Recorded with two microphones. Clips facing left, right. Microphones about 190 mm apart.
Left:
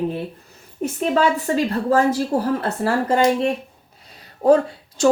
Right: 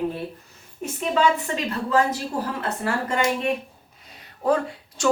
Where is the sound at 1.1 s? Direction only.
45° left (ahead or behind).